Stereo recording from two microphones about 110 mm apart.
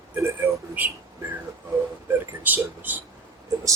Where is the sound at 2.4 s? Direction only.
15° right (ahead or behind).